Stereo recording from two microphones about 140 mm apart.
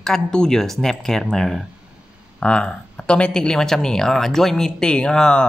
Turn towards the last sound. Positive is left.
turn(degrees=5)  # may be behind; listen again after turning